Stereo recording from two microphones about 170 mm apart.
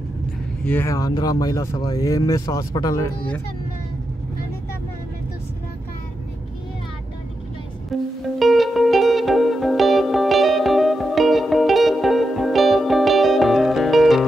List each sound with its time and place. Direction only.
0.7 s speech: 15° left (ahead or behind)
8.2 s music: centre (ahead or behind)